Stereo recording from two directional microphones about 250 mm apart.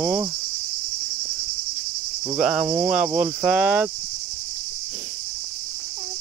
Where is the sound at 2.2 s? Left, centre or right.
Centre.